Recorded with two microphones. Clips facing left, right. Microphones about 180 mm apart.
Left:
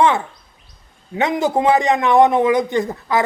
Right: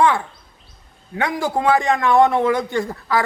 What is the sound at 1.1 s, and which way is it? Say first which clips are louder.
A man's voice: left 4 dB; 20° left (ahead or behind).